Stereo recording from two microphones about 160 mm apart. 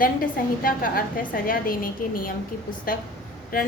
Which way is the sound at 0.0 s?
60° left (ahead or behind).